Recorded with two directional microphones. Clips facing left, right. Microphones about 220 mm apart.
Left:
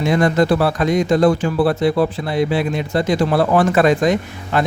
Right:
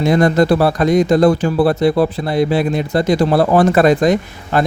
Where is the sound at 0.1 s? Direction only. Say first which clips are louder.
Right 3 dB; 40° right (ahead or behind).